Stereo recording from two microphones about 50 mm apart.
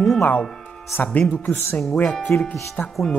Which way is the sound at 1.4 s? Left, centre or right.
Left.